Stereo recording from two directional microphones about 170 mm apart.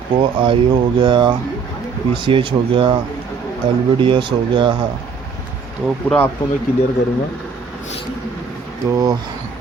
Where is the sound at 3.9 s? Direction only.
30° right (ahead or behind).